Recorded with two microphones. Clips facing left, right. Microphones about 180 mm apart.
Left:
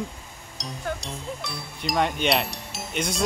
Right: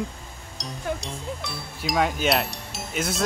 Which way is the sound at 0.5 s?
Centre (ahead or behind).